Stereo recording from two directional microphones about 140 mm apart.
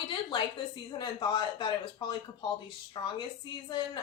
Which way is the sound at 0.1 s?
35° left (ahead or behind).